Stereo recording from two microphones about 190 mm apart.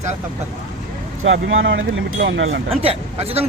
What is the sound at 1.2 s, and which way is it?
Speech, 90° right.